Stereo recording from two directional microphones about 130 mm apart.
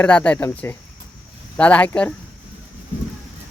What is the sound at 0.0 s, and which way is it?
Speech, 10° left (ahead or behind).